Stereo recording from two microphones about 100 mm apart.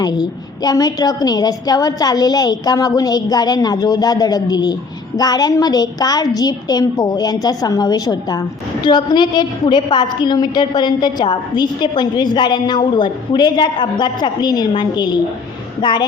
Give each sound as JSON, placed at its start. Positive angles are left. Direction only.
{"t": 0.0, "sound": "a woman's voice", "side_deg": 40}